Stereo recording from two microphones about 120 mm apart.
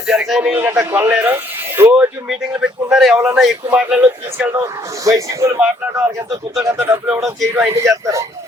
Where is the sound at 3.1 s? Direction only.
20° right (ahead or behind).